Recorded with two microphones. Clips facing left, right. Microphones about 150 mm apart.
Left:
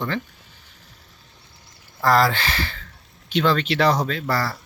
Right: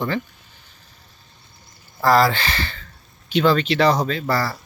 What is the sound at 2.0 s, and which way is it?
Speech, centre (ahead or behind).